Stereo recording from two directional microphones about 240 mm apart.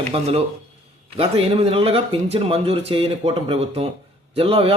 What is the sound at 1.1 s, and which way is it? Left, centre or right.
Speech, right.